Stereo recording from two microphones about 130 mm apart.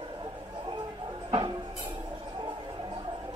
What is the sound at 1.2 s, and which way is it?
Music, 40° right (ahead or behind).